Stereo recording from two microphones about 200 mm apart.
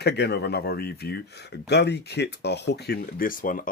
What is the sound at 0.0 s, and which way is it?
Speech, 55° left (ahead or behind).